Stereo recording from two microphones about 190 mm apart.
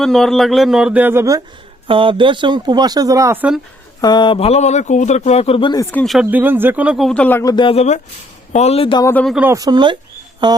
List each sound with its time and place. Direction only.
0.0 s speech: centre (ahead or behind); by 1.4 s 15° right (ahead or behind)
1.9 s speech: 25° right (ahead or behind); by 3.6 s 10° right (ahead or behind)
4.0 s a man's voice: 25° left (ahead or behind)
5.9 s speech: 5° left (ahead or behind)
7.5 s a man's voice: 25° left (ahead or behind)
9.0 s speech: 10° left (ahead or behind)
9.3 s speech: 10° right (ahead or behind)